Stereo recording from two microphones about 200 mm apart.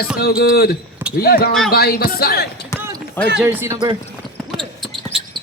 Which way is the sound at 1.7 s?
50° left (ahead or behind).